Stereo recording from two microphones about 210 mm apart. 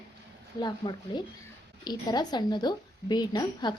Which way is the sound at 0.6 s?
20° left (ahead or behind).